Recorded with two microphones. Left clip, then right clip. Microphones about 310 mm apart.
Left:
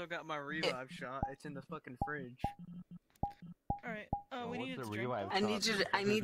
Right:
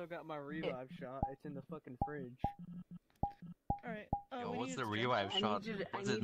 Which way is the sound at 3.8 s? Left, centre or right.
Centre.